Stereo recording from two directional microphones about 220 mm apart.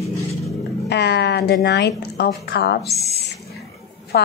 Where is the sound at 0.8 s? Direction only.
50° left (ahead or behind).